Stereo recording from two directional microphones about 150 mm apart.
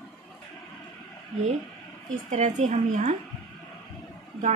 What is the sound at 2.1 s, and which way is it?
A woman's voice, 55° right (ahead or behind).